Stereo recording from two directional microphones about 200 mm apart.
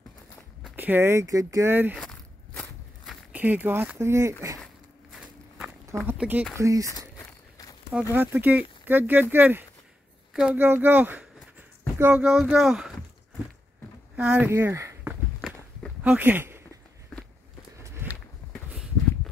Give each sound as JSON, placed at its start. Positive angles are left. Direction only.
{"t": 0.7, "sound": "speech", "side_deg": -10}
{"t": 2.0, "sound": "walk", "side_deg": 5}
{"t": 3.1, "sound": "speech", "side_deg": -10}
{"t": 6.0, "sound": "speech", "side_deg": -10}
{"t": 7.2, "sound": "walk", "side_deg": 15}
{"t": 8.1, "sound": "speech", "side_deg": -10}
{"t": 14.1, "sound": "speech", "side_deg": -5}
{"t": 15.4, "sound": "walk", "side_deg": -5}
{"t": 17.8, "sound": "a sound", "side_deg": -10}
{"t": 18.7, "sound": "walk", "side_deg": 0}